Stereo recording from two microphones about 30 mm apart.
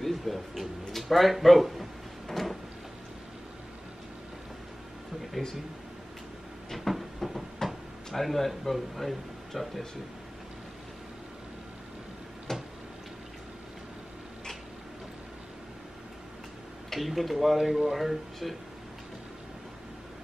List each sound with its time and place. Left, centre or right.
0.0 s a sound: centre
1.1 s speech: centre
2.2 s a sound: centre
5.4 s speech: centre
6.7 s cupboard open or close: centre
7.6 s drawer open or close: centre
8.7 s speech: centre
12.5 s tick-tock: centre
16.9 s speech: centre
17.6 s speech: centre
17.9 s speech: centre